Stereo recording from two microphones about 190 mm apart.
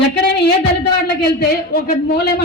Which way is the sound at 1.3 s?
55° left (ahead or behind).